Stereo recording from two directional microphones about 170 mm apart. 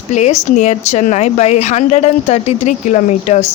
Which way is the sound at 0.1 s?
45° left (ahead or behind).